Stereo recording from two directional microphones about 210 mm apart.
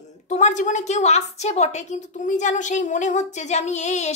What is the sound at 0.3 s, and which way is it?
A woman's voice, 35° left (ahead or behind).